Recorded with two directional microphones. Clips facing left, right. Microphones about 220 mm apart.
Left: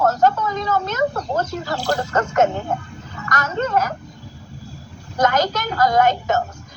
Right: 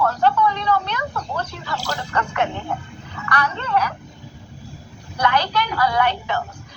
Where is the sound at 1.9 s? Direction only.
45° left (ahead or behind).